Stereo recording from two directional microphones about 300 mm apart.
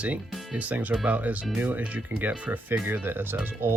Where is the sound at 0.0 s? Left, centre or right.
Centre.